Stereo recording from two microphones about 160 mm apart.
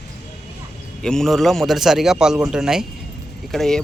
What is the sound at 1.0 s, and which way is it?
A man's voice, 5° left (ahead or behind).